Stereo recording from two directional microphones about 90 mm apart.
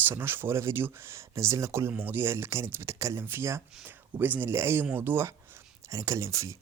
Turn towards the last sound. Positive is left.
turn(degrees=-35)  # may be behind; listen again after turning